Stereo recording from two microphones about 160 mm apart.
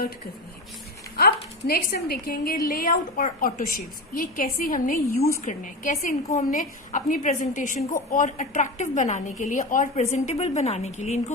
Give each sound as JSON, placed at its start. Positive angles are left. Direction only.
{"t": 1.1, "sound": "a woman's voice", "side_deg": 75}